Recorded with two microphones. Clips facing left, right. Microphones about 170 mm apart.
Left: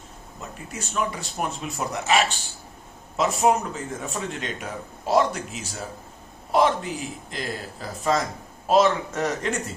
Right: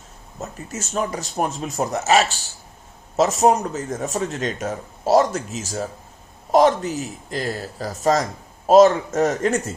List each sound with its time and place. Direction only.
0.3 s a man's voice: 45° right (ahead or behind)